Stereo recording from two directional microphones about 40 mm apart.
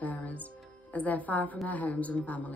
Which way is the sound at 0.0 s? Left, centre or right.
Left.